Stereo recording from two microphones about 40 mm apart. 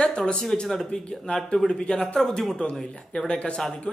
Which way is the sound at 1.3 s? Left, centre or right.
Left.